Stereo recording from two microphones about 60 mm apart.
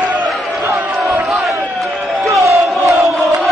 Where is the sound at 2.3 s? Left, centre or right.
Right.